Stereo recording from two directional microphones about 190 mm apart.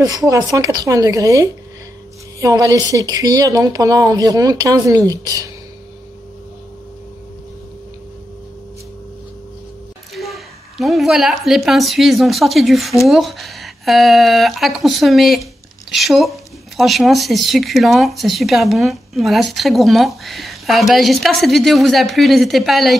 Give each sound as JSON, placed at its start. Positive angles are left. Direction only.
{"t": 0.0, "sound": "a woman's voice", "side_deg": -20}
{"t": 10.1, "sound": "a woman's voice", "side_deg": 0}